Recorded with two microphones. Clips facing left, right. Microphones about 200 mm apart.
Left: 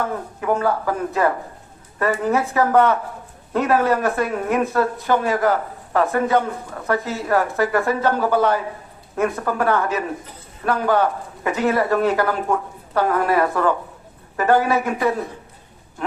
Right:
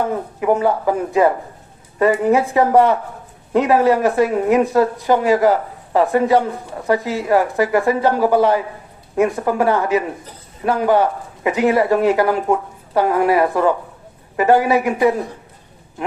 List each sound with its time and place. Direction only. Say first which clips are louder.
0.0 s speech: right 5 dB; 15° right (ahead or behind)